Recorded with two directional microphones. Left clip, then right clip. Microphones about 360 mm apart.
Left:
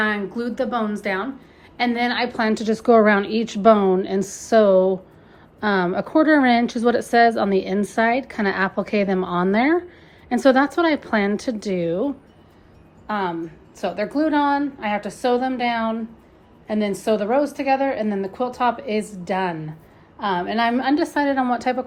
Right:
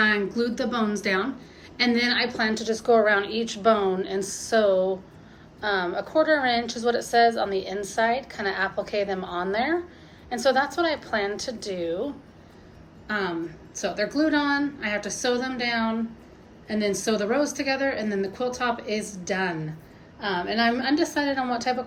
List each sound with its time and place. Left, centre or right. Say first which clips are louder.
0.0 s a woman's voice: even; centre
13.1 s a woman's voice: left 3 dB; centre